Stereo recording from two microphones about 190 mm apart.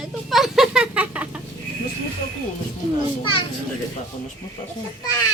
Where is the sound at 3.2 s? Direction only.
25° left (ahead or behind).